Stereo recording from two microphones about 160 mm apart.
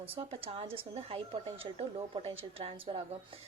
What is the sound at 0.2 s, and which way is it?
A woman's voice, 35° right (ahead or behind).